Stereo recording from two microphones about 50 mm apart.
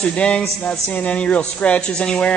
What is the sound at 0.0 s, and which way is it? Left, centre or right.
A man's voice, left.